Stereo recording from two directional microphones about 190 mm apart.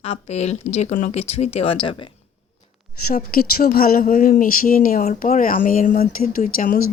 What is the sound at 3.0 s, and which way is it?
Speech, 50° left (ahead or behind).